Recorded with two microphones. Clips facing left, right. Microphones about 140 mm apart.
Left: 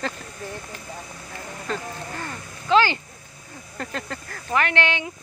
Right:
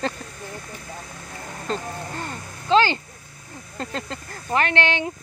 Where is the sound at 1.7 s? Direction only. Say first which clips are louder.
Right 2 dB; 30° right (ahead or behind).